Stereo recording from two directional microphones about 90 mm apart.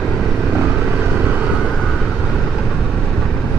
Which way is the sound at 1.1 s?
15° right (ahead or behind).